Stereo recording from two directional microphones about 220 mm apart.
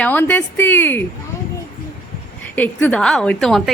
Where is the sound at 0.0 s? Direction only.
5° left (ahead or behind).